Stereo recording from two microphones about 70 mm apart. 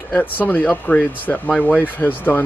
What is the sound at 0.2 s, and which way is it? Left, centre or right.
Speech, left.